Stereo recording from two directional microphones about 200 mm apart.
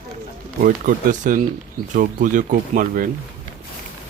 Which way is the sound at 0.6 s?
40° right (ahead or behind).